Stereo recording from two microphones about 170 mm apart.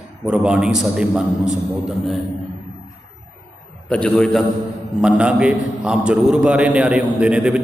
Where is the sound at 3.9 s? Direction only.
5° left (ahead or behind).